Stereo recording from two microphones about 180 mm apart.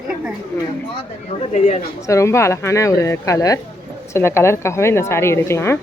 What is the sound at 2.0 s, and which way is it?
Speech, 15° left (ahead or behind).